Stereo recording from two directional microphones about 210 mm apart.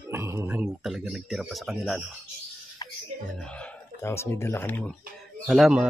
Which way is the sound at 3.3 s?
5° left (ahead or behind).